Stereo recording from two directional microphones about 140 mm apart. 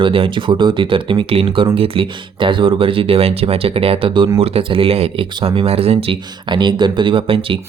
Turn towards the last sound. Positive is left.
turn(degrees=-40)  # may be behind; listen again after turning